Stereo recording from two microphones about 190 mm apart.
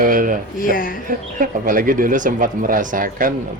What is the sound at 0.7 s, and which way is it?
Speech, 50° left (ahead or behind).